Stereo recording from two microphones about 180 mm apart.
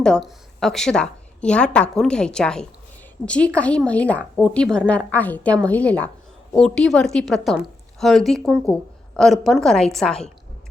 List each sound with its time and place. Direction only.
0.0 s a woman's voice: centre (ahead or behind)